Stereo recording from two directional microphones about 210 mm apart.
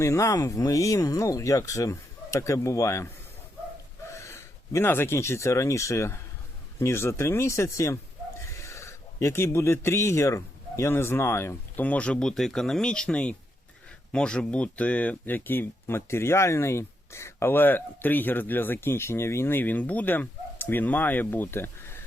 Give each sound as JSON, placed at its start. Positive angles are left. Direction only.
{"t": 0.0, "sound": "speech", "side_deg": 15}